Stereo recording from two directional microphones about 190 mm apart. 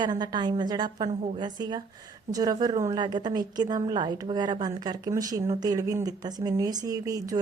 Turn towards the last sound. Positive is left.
turn(degrees=-20)  # may be behind; listen again after turning